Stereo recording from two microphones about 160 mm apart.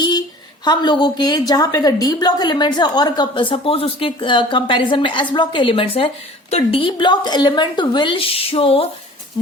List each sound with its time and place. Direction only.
0.6 s a woman's voice: 25° left (ahead or behind)